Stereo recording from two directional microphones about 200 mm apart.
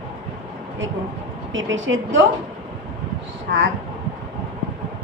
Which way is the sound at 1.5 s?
70° right (ahead or behind).